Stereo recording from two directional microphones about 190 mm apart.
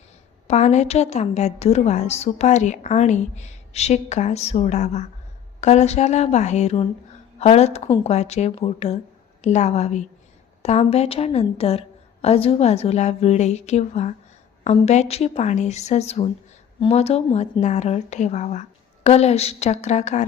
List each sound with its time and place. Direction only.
0.4 s a woman's voice: 35° left (ahead or behind)